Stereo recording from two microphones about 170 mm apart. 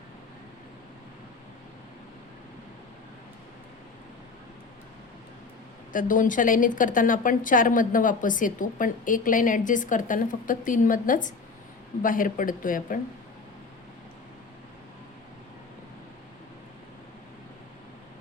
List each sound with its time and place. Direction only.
5.9 s a woman's voice: 50° left (ahead or behind)